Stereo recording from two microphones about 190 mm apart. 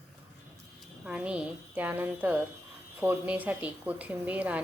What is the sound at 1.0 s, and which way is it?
Speech, 5° right (ahead or behind).